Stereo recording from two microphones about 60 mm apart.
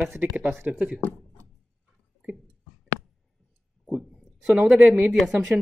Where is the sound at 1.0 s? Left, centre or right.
Left.